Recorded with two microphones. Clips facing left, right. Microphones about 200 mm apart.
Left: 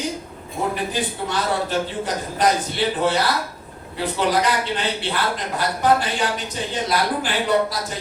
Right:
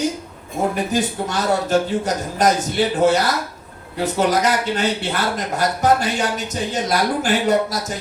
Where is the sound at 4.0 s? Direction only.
45° right (ahead or behind).